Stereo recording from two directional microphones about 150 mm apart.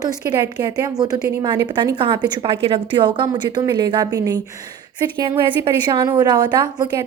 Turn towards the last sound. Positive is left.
turn(degrees=-30)  # may be behind; listen again after turning